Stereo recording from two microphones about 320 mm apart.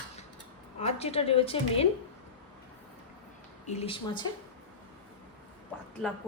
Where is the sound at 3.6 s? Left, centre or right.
Centre.